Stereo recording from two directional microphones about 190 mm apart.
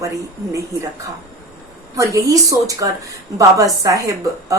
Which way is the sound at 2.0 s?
15° right (ahead or behind).